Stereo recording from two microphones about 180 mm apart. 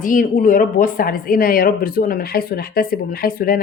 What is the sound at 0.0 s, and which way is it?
Speech, 45° left (ahead or behind).